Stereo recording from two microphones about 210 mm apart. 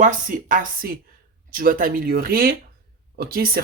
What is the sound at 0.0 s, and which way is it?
Speech, 40° right (ahead or behind).